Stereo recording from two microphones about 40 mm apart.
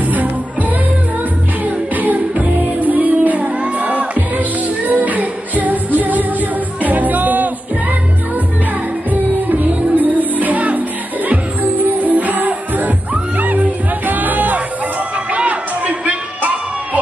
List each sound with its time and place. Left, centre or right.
0.0 s music: right
9.1 s music: right
15.3 s a sound: right